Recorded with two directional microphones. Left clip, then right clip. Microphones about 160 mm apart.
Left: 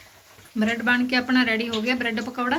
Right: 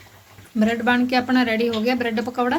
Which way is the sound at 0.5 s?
40° right (ahead or behind).